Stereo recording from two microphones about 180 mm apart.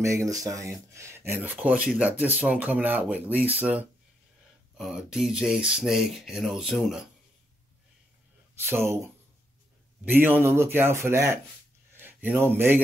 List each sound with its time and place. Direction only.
0.0 s speech: 15° right (ahead or behind)
8.6 s a man's voice: 15° right (ahead or behind)